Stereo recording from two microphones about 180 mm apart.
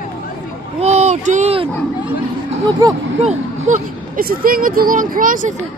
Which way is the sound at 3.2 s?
40° right (ahead or behind).